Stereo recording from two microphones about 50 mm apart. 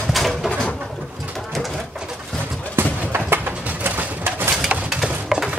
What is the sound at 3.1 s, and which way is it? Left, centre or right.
Bird, right.